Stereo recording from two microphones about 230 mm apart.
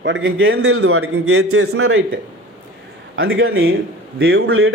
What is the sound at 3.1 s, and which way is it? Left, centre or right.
A man's voice, right.